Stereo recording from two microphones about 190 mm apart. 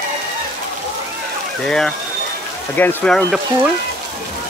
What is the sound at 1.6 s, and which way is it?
Speech, 5° left (ahead or behind).